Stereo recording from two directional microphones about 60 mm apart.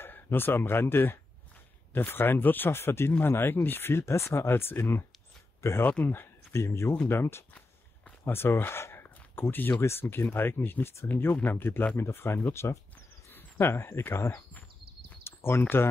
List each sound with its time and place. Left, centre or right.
0.0 s speech: left
5.9 s speech: left
6.5 s speech: left
15.2 s a sound: left